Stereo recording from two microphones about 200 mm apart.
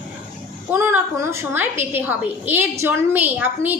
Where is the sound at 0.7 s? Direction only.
10° right (ahead or behind).